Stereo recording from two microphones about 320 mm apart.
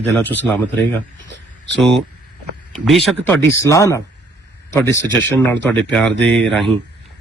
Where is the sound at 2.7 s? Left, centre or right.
Centre.